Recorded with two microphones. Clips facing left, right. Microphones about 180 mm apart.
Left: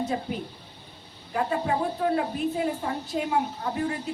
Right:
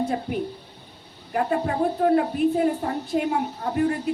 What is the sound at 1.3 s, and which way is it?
Speech, 50° right (ahead or behind).